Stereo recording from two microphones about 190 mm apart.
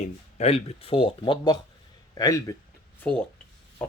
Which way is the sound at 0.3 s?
30° left (ahead or behind).